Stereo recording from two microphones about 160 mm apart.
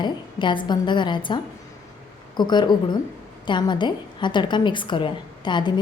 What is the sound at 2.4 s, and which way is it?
A woman's voice, 25° left (ahead or behind).